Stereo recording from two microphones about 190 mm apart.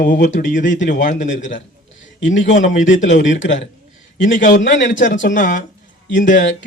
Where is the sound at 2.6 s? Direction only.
40° left (ahead or behind).